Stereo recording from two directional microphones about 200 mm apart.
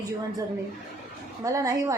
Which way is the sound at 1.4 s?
15° right (ahead or behind).